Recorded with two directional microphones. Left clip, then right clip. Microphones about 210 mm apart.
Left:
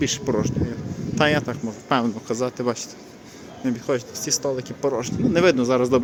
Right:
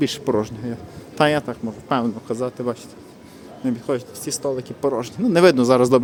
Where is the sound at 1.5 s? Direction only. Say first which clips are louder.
Even; 5° right (ahead or behind).